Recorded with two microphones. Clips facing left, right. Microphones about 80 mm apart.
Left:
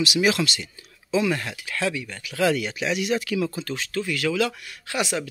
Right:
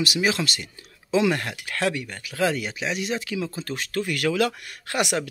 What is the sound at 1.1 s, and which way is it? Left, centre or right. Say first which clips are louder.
Speech: right 1 dB; right.